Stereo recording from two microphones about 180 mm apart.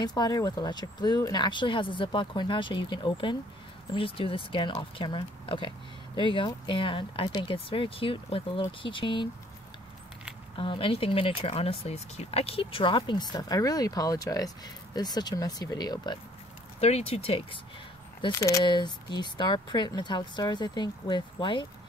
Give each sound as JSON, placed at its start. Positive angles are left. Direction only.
{"t": 0.0, "sound": "speech", "side_deg": 20}
{"t": 10.6, "sound": "speech", "side_deg": 30}
{"t": 16.8, "sound": "speech", "side_deg": 35}
{"t": 18.2, "sound": "speech", "side_deg": 20}